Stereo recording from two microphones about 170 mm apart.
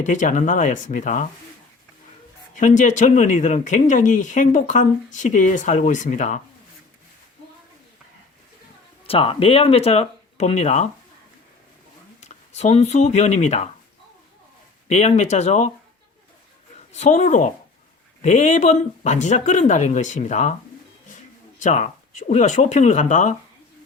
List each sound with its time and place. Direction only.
0.0 s speech: 50° left (ahead or behind)
2.6 s speech: 50° left (ahead or behind)
9.0 s speech: 35° left (ahead or behind)
12.3 s speech: 40° left (ahead or behind)
14.8 s speech: 40° left (ahead or behind)
16.9 s speech: 45° left (ahead or behind)
21.6 s speech: 45° left (ahead or behind)